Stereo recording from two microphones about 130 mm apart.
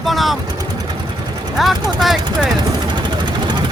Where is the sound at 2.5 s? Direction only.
35° right (ahead or behind).